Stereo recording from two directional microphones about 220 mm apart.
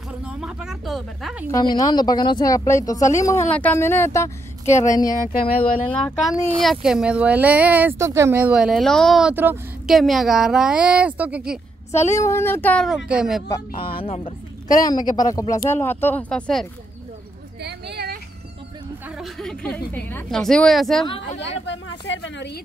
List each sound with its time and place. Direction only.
0.4 s speech: 5° right (ahead or behind)
1.5 s speech: 20° left (ahead or behind)
5.2 s speech: 40° left (ahead or behind)
5.9 s speech: centre (ahead or behind)
12.1 s speech: 10° left (ahead or behind); by 13.4 s 5° right (ahead or behind)
13.5 s speech: 25° left (ahead or behind); by 16.6 s 5° left (ahead or behind)
17.6 s a sound: 50° right (ahead or behind)
19.0 s a sound: centre (ahead or behind)
19.9 s speech: 10° left (ahead or behind)
21.0 s speech: 25° left (ahead or behind)
21.4 s speech: 55° left (ahead or behind)